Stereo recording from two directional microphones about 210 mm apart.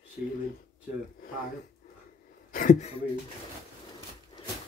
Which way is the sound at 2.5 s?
40° left (ahead or behind).